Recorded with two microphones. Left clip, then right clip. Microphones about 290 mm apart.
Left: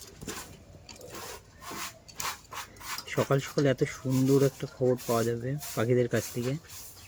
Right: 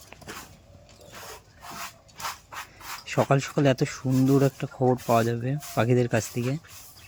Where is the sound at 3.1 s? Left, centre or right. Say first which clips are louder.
Right 5 dB; centre.